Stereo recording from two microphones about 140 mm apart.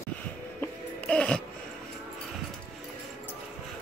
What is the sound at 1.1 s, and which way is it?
Music, 10° left (ahead or behind).